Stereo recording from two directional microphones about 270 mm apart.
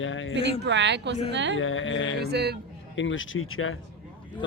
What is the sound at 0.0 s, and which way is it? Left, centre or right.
Speech, left.